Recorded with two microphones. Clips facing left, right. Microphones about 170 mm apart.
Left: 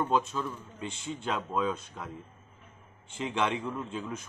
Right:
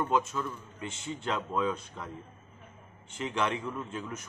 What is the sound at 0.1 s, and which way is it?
Speech, 15° left (ahead or behind).